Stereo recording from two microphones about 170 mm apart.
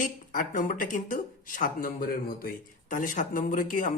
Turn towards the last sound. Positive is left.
turn(degrees=55)  # may be behind; listen again after turning